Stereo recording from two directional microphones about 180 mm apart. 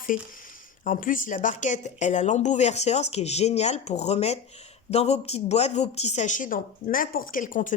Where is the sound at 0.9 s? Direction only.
50° left (ahead or behind).